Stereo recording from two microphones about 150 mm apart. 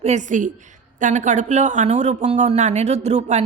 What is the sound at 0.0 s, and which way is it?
A woman's voice, 55° right (ahead or behind).